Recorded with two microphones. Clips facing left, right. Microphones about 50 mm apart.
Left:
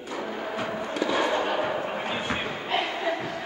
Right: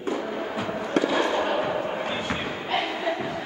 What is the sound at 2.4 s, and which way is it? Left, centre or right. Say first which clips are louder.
Slam: right 1 dB; centre.